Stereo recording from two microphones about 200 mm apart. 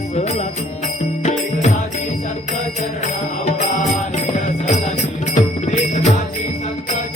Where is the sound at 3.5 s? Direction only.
35° left (ahead or behind).